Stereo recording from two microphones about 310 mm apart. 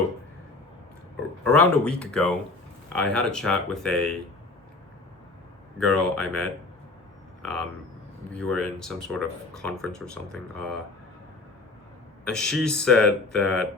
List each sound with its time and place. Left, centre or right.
1.5 s speech: centre
5.8 s speech: centre
7.4 s speech: right
8.3 s speech: centre
12.2 s speech: centre